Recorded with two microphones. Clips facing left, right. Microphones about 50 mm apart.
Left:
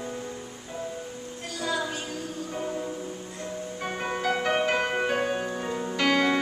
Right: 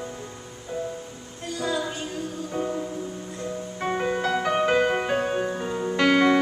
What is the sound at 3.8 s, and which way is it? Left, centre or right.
Music, centre.